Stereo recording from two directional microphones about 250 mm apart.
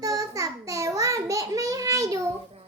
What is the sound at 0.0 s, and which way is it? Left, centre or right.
Child singing, centre.